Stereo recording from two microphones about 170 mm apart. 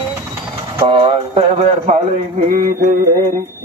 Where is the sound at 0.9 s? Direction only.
30° right (ahead or behind); by 2.8 s 45° right (ahead or behind).